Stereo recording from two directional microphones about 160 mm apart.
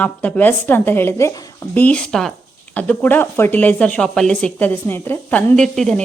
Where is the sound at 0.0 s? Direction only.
10° left (ahead or behind).